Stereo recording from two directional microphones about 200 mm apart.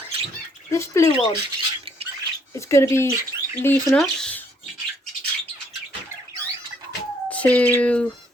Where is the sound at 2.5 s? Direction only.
15° left (ahead or behind).